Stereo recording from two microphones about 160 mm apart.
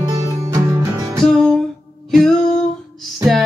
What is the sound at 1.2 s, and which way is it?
Music, centre (ahead or behind).